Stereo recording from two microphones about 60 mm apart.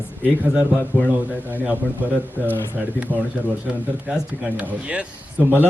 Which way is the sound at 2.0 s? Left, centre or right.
Right.